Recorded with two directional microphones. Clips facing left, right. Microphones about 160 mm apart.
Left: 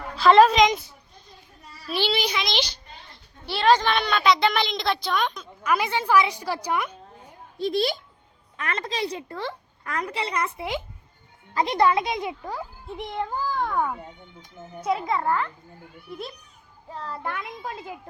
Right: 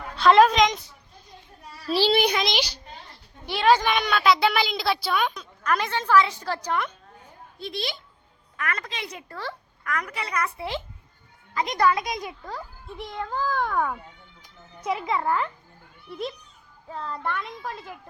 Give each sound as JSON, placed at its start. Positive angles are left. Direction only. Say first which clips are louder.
{"t": 0.2, "sound": "a woman's voice", "louder": "left 1 dB", "side_deg": 0}
{"t": 1.9, "sound": "child singing", "louder": "right 4 dB", "side_deg": -35}
{"t": 2.1, "sound": "a child's voice", "louder": "right 4 dB", "side_deg": -55}
{"t": 2.5, "sound": "a child's voice", "louder": "even", "side_deg": -10}
{"t": 5.6, "sound": "a woman's voice", "louder": "left 1 dB", "side_deg": 10}
{"t": 7.6, "sound": "speech", "louder": "left 9 dB", "side_deg": 45}
{"t": 8.5, "sound": "a woman's voice", "louder": "left 3 dB", "side_deg": 25}
{"t": 10.6, "sound": "a woman's voice", "louder": "left 1 dB", "side_deg": 15}
{"t": 11.5, "sound": "a woman's voice", "louder": "left 2 dB", "side_deg": 30}
{"t": 13.5, "sound": "a woman's voice", "louder": "even", "side_deg": 0}
{"t": 13.9, "sound": "speech", "louder": "left 2 dB", "side_deg": 25}
{"t": 16.0, "sound": "a woman's voice", "louder": "right 4 dB", "side_deg": 10}